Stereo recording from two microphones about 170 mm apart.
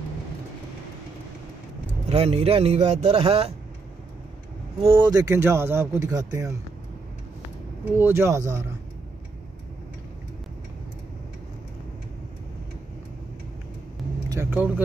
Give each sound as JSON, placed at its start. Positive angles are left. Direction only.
{"t": 2.0, "sound": "speech", "side_deg": -40}
{"t": 4.8, "sound": "speech", "side_deg": -25}
{"t": 8.0, "sound": "speech", "side_deg": -15}
{"t": 14.3, "sound": "speech", "side_deg": -10}